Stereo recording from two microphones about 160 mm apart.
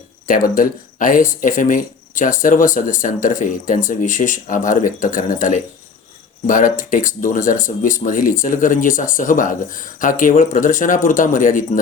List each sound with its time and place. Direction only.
0.5 s speech: 55° left (ahead or behind)